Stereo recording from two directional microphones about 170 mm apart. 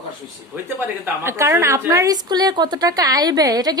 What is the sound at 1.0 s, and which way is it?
A woman's voice, 15° right (ahead or behind).